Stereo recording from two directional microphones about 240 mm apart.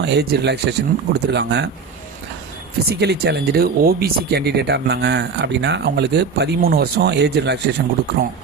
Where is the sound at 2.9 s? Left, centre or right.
Right.